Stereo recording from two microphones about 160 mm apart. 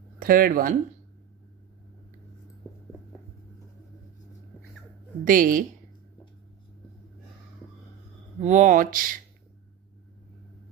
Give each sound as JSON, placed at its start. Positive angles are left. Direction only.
{"t": 0.2, "sound": "speech", "side_deg": -60}
{"t": 5.2, "sound": "a woman's voice", "side_deg": -60}
{"t": 8.4, "sound": "speech", "side_deg": -45}